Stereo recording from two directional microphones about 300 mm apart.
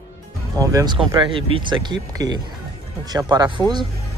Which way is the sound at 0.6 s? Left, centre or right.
Centre.